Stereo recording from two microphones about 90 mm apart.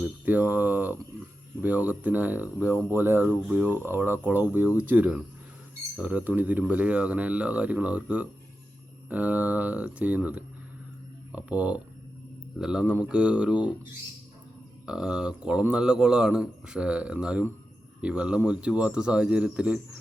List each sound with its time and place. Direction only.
0.3 s speech: 20° right (ahead or behind)
14.8 s speech: 10° right (ahead or behind)